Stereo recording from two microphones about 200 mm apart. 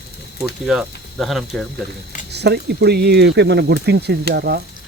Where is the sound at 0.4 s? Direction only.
Centre (ahead or behind).